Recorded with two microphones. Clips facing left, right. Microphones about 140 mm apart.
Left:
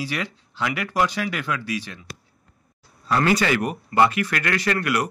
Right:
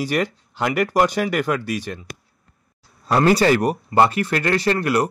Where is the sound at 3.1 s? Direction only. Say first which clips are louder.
Right 5 dB; 35° right (ahead or behind).